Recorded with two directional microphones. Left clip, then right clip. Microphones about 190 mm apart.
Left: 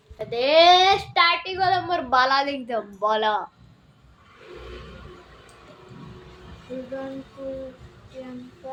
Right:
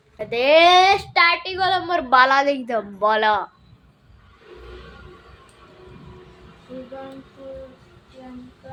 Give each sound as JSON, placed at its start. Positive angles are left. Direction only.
{"t": 0.2, "sound": "child singing", "side_deg": -30}